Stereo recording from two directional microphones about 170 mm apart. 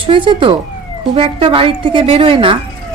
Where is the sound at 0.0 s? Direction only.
30° right (ahead or behind).